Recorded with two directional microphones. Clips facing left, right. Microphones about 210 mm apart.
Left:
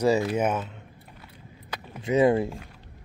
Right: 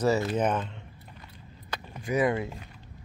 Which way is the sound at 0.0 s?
10° left (ahead or behind).